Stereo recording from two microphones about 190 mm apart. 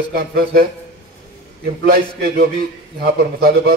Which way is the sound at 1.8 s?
55° right (ahead or behind).